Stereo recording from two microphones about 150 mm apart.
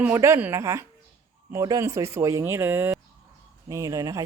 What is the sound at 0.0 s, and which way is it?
Speech, 15° right (ahead or behind).